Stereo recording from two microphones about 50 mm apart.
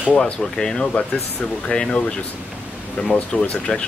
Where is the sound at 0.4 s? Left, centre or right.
Centre.